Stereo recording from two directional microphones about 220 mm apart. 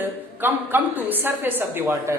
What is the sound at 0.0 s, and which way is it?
A woman's voice, 10° right (ahead or behind).